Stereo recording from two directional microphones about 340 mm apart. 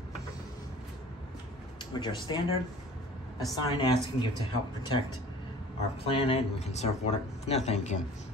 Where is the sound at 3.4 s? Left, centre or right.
Centre.